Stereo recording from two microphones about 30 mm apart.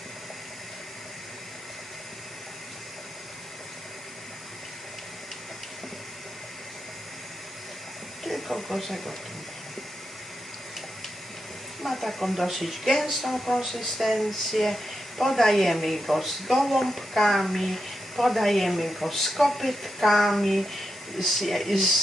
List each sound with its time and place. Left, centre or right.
8.2 s speech: centre
11.8 s speech: centre